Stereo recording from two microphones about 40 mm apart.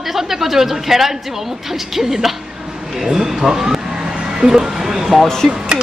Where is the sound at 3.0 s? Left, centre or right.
Centre.